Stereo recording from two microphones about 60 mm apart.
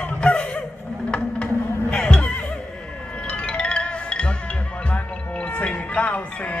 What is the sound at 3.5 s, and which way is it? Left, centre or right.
Music, centre.